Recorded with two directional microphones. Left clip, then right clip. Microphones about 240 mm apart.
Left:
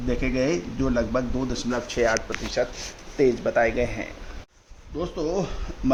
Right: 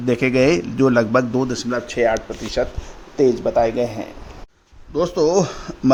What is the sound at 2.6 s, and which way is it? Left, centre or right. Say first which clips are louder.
Speech: right 4 dB; right.